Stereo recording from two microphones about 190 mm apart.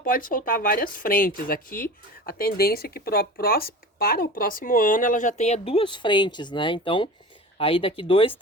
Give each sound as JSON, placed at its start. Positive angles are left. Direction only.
{"t": 0.0, "sound": "speech", "side_deg": 50}